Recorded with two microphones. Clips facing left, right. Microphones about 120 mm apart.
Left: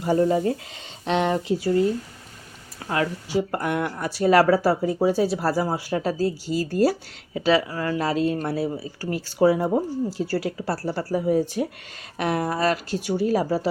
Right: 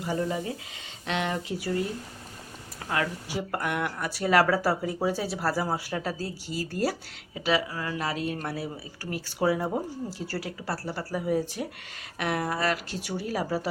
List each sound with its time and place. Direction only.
0.0 s speech: 40° left (ahead or behind)
2.9 s speech: 25° left (ahead or behind)
7.3 s speech: 35° left (ahead or behind)